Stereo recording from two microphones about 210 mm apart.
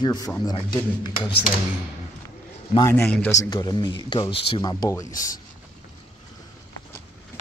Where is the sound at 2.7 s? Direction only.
15° left (ahead or behind).